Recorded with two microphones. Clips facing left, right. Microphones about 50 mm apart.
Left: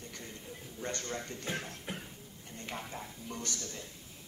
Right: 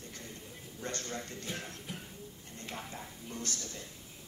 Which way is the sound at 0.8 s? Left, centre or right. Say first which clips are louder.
Left 1 dB; left.